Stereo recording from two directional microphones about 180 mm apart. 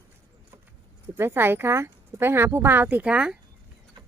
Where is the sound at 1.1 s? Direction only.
10° right (ahead or behind).